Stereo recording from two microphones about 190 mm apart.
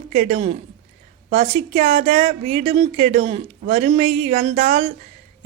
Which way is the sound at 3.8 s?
45° right (ahead or behind).